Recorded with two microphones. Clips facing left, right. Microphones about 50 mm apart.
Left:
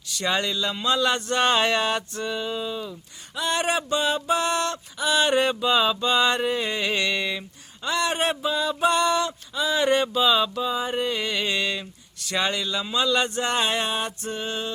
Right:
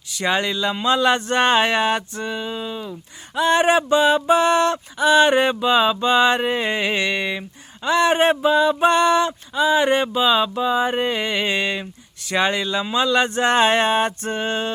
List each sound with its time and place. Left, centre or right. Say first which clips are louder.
0.2 s male singing: right 4 dB; right
3.3 s male singing: right 8 dB; right
12.3 s speech: right 5 dB; right